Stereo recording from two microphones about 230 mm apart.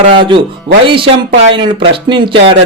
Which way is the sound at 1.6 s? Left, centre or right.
Right.